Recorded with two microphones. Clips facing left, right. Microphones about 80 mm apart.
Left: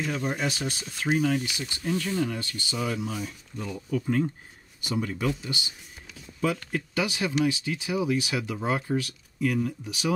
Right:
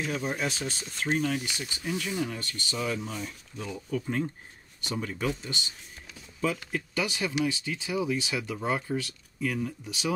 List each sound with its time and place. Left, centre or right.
0.0 s speech: centre
1.8 s speech: centre
2.3 s speech: centre
7.0 s speech: centre
9.6 s speech: centre